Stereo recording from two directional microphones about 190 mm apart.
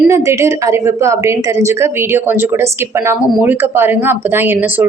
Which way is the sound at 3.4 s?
10° right (ahead or behind).